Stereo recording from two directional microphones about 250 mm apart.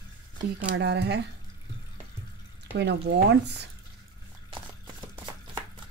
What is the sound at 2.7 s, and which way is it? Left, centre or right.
Speech, right.